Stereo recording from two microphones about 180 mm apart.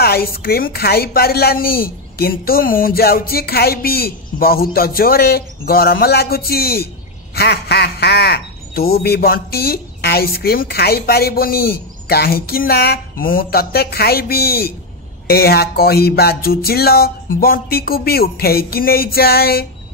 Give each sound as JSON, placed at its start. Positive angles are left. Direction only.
{"t": 0.0, "sound": "speech", "side_deg": 55}